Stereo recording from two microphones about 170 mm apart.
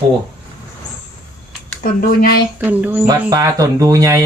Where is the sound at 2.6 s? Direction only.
10° right (ahead or behind).